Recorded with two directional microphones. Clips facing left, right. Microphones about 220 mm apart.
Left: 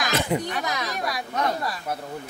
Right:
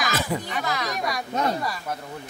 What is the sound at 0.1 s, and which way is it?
Speech, 20° left (ahead or behind).